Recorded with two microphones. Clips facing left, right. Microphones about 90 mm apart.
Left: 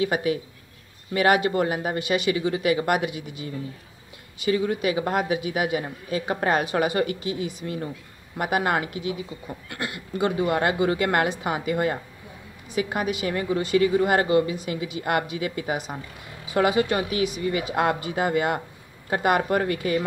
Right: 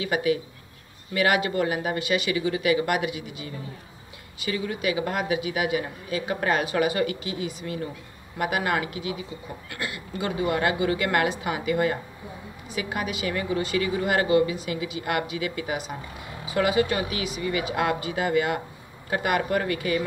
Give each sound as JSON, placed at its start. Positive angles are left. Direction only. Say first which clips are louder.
{"t": 0.0, "sound": "speech", "louder": "left 1 dB", "side_deg": 35}
{"t": 4.5, "sound": "speech", "louder": "left 4 dB", "side_deg": 35}